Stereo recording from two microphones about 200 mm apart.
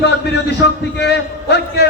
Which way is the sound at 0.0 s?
55° left (ahead or behind).